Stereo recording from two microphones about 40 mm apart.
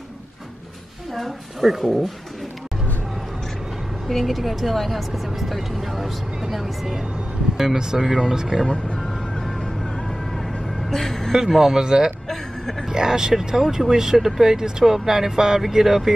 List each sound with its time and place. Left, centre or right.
1.1 s speech: centre
4.1 s speech: centre
8.6 s speech: centre
9.3 s music: centre
10.9 s a sound: centre
11.3 s speech: centre
12.3 s vehicle: centre
12.8 s speech: centre